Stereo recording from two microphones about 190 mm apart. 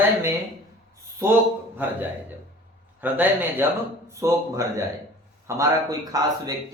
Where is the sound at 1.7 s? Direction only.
10° right (ahead or behind).